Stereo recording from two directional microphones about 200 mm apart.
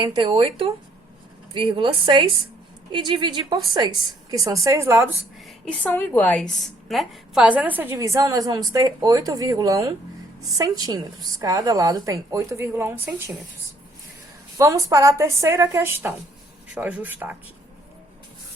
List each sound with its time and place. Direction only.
0.0 s a woman's voice: 25° right (ahead or behind)
5.4 s a woman's voice: 5° left (ahead or behind)
14.6 s a woman's voice: 15° right (ahead or behind)